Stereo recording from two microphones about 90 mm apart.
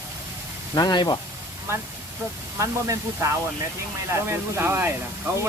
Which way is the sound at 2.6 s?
35° right (ahead or behind).